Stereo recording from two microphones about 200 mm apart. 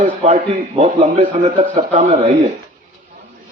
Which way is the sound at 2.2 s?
25° right (ahead or behind).